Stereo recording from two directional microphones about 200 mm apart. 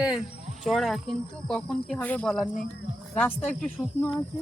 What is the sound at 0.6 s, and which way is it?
Speech, centre (ahead or behind).